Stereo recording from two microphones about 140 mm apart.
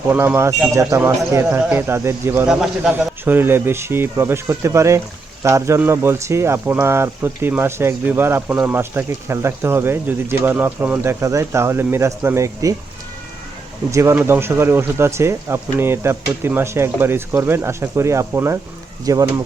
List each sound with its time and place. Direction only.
0.1 s speech: 15° right (ahead or behind)
2.5 s a man's voice: 5° right (ahead or behind)
3.2 s speech: 15° right (ahead or behind)
13.9 s speech: 20° right (ahead or behind)